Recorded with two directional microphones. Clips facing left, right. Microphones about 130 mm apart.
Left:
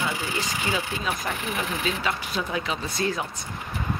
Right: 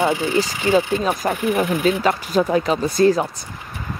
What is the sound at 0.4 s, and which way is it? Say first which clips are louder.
Speech: right 12 dB; 40° right (ahead or behind).